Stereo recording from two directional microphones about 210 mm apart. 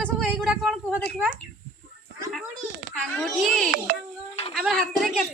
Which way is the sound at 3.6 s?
45° right (ahead or behind).